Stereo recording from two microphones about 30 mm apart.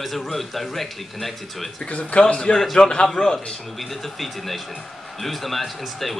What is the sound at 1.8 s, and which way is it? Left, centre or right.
Speech, left.